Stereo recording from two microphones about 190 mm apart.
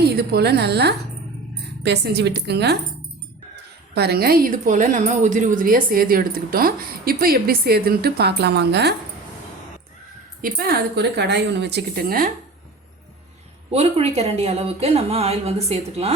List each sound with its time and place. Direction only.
0.0 s a woman's voice: 55° right (ahead or behind)
10.4 s a woman's voice: 55° right (ahead or behind)
13.7 s a woman's voice: 35° right (ahead or behind)